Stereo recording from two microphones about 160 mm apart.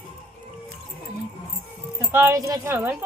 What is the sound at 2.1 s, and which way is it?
Speech, 15° right (ahead or behind).